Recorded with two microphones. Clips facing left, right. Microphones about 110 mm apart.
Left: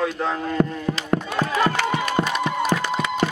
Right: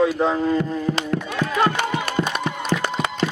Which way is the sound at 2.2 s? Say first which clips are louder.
Right 1 dB; 65° left (ahead or behind).